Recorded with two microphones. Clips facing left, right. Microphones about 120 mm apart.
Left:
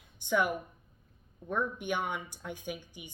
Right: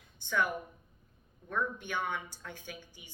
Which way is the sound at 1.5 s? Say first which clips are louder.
Left 3 dB; 15° left (ahead or behind).